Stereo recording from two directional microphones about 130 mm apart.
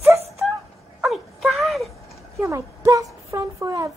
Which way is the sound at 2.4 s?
25° right (ahead or behind).